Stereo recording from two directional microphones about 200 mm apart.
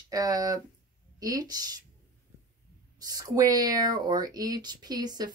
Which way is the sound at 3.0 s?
20° right (ahead or behind).